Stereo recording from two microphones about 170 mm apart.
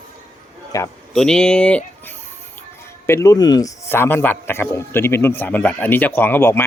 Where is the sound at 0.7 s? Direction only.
20° left (ahead or behind).